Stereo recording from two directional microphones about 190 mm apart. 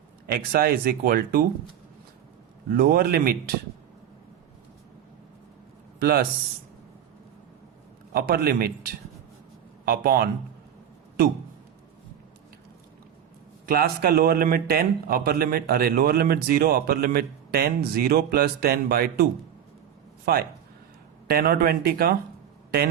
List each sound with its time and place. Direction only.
0.3 s a man's voice: 50° right (ahead or behind)
2.6 s a man's voice: 55° right (ahead or behind)
6.0 s speech: 55° right (ahead or behind)
8.1 s a man's voice: 55° right (ahead or behind)
13.7 s a man's voice: 55° right (ahead or behind)
21.2 s a man's voice: 55° right (ahead or behind)